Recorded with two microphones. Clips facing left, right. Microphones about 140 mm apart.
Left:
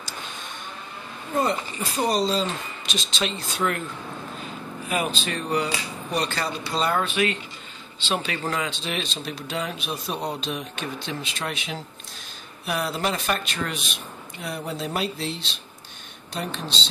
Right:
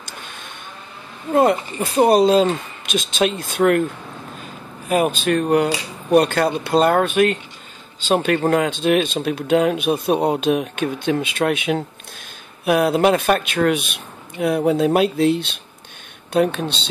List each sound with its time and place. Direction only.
1.3 s speech: 60° right (ahead or behind)
4.8 s speech: 50° right (ahead or behind)